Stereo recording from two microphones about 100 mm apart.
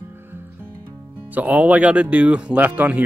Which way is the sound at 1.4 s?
15° right (ahead or behind).